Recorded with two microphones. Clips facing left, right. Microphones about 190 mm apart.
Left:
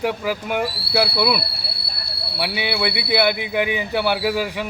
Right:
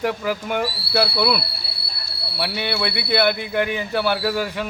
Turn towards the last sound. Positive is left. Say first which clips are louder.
# left 1 dB
turn(degrees=10)  # may be behind; listen again after turning